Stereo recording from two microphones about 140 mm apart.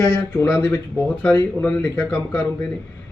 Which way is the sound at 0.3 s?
20° left (ahead or behind).